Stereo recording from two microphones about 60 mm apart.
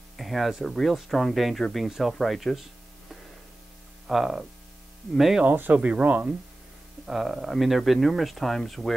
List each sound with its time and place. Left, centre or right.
0.2 s speech: centre
5.4 s speech: right
7.1 s speech: centre